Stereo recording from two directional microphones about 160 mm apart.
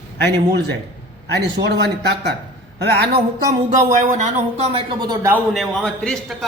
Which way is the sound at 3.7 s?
55° right (ahead or behind).